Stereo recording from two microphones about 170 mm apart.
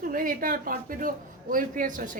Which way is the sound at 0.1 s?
55° right (ahead or behind).